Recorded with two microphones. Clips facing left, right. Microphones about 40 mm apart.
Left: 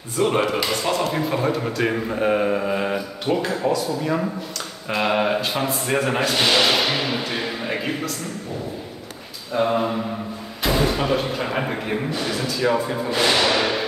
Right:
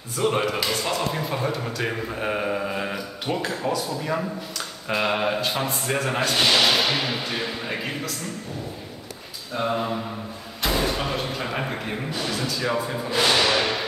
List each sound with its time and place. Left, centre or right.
0.1 s a man's voice: centre
4.8 s a man's voice: centre
9.5 s a man's voice: centre